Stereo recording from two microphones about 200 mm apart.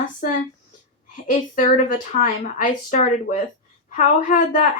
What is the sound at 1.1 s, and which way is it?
A woman's voice, 40° left (ahead or behind).